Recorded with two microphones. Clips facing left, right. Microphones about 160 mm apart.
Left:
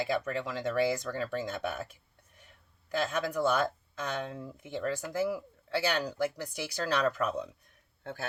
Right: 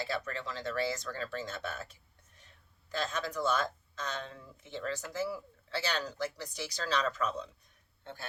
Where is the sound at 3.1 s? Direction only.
10° left (ahead or behind).